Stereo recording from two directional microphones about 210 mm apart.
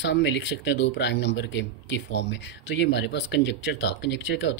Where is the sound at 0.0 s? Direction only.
55° left (ahead or behind).